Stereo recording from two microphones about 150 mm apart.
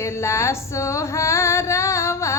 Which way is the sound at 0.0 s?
20° left (ahead or behind).